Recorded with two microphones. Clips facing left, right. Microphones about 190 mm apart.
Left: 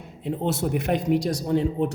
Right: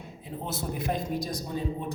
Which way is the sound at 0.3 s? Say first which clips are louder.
Left 9 dB; 75° left (ahead or behind).